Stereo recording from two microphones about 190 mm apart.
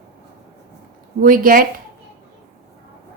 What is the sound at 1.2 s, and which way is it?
Speech, 45° right (ahead or behind).